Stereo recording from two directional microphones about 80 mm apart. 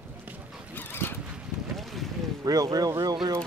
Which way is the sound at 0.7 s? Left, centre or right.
Left.